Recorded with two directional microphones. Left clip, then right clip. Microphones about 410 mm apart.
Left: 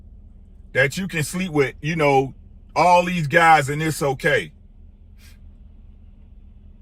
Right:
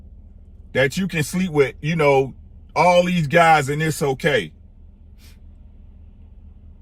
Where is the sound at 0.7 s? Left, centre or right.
Centre.